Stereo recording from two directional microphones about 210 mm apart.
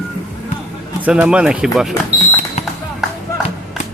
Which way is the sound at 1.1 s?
5° right (ahead or behind).